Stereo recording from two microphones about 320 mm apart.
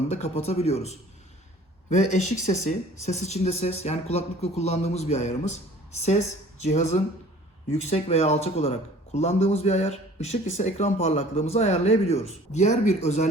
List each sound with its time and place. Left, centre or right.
0.1 s speech: centre